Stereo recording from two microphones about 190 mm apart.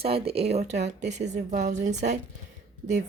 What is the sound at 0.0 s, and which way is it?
Speech, 30° right (ahead or behind).